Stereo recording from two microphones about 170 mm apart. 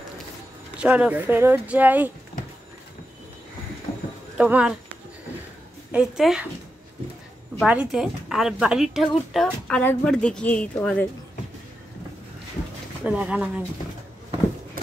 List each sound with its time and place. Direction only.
0.7 s speech: 10° right (ahead or behind)
4.4 s a woman's voice: 5° right (ahead or behind)
5.9 s a woman's voice: 5° right (ahead or behind)
7.6 s a woman's voice: 5° right (ahead or behind)
13.0 s speech: 5° right (ahead or behind)